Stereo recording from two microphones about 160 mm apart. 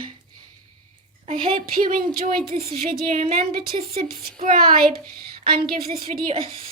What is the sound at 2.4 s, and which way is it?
A woman's voice, 40° right (ahead or behind).